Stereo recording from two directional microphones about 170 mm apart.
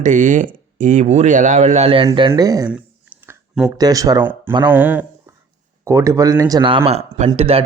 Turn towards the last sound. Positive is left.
turn(degrees=-35)  # may be behind; listen again after turning